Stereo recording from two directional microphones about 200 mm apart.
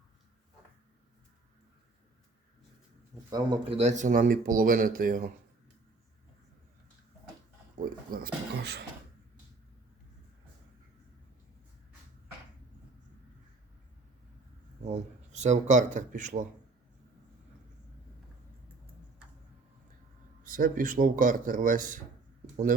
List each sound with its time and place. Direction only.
3.3 s speech: 20° right (ahead or behind)
3.8 s speech: 35° right (ahead or behind)
8.1 s speech: 50° right (ahead or behind)
14.8 s speech: 35° right (ahead or behind)
20.4 s speech: 45° right (ahead or behind)